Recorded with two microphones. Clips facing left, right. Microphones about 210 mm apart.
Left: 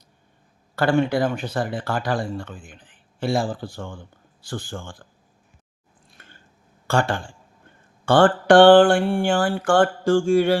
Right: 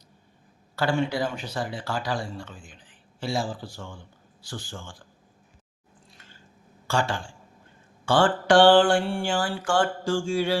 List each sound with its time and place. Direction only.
0.8 s speech: 55° left (ahead or behind)
6.1 s chewing: 55° left (ahead or behind)
6.8 s a man's voice: 55° left (ahead or behind)